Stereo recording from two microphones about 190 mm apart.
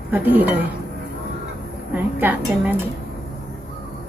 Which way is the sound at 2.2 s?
10° right (ahead or behind).